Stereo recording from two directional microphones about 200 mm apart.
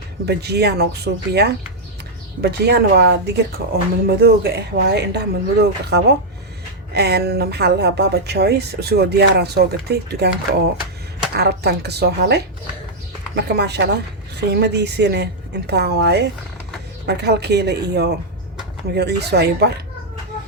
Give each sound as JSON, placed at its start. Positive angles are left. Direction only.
{"t": 0.3, "sound": "a woman's voice", "side_deg": -55}